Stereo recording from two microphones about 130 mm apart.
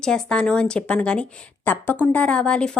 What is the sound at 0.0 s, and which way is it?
A woman's voice, 5° left (ahead or behind).